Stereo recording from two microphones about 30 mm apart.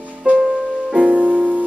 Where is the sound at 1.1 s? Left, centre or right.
Right.